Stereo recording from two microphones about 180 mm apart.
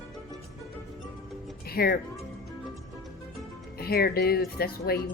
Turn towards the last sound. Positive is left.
turn(degrees=60)  # may be behind; listen again after turning